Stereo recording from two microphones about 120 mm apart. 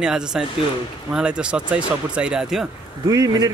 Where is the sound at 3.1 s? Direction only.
30° right (ahead or behind).